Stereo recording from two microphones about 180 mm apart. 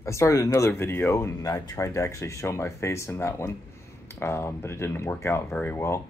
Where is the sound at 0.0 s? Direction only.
15° left (ahead or behind).